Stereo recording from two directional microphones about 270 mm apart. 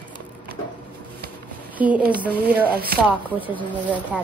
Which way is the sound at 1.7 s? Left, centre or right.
Centre.